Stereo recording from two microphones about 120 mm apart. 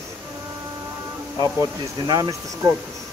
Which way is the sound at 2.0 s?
35° right (ahead or behind).